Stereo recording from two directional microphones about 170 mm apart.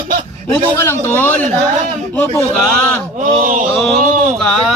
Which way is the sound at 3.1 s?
55° right (ahead or behind).